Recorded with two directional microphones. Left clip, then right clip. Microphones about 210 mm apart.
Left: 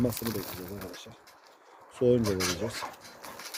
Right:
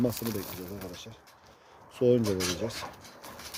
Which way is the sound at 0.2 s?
10° right (ahead or behind).